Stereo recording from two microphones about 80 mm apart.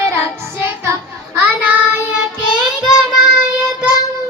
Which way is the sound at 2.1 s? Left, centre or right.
Centre.